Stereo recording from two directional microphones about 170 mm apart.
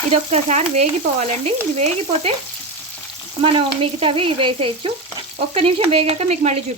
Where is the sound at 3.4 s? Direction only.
35° right (ahead or behind).